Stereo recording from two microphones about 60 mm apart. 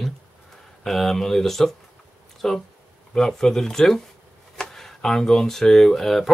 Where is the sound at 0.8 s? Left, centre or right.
Centre.